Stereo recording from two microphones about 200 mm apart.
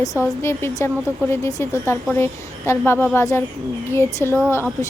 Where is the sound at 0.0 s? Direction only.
15° left (ahead or behind).